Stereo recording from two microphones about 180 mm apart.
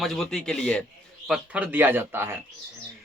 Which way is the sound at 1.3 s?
10° right (ahead or behind).